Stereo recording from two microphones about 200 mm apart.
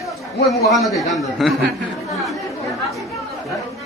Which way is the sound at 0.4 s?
Centre (ahead or behind).